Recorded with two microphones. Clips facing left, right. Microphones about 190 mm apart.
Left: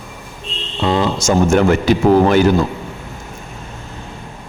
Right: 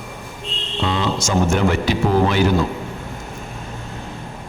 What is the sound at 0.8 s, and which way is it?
A man's voice, 45° left (ahead or behind).